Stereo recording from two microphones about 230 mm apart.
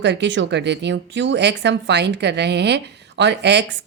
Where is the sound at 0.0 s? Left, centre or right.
Right.